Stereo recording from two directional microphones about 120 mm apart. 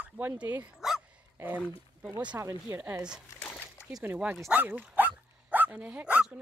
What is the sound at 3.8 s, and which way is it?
Speech, 10° right (ahead or behind).